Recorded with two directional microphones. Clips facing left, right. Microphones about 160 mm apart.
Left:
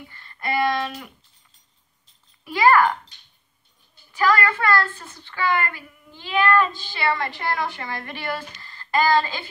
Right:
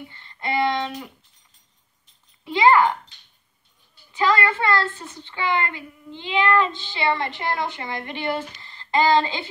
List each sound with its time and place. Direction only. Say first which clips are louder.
0.1 s a sound: even; 20° right (ahead or behind)
2.4 s a child's voice: even; 20° right (ahead or behind)
4.1 s a child's voice: even; 20° right (ahead or behind)